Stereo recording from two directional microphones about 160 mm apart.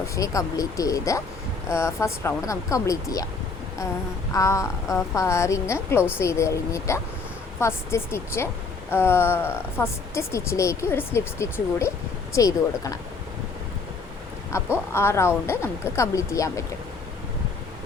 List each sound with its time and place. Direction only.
0.0 s a woman's voice: 20° left (ahead or behind)
4.3 s a woman's voice: 20° left (ahead or behind)
14.5 s a woman's voice: 15° left (ahead or behind)